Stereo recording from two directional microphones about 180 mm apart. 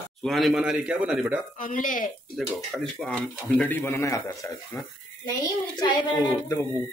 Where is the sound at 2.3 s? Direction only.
Centre (ahead or behind); by 6.6 s 20° left (ahead or behind).